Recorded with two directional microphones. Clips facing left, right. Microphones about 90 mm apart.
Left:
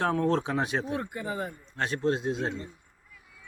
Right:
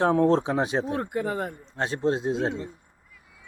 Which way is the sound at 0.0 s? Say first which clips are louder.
Right 5 dB; 25° right (ahead or behind).